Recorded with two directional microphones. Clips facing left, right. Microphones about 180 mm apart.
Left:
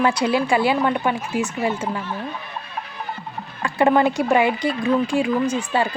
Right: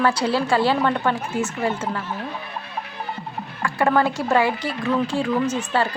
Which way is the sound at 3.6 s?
20° left (ahead or behind).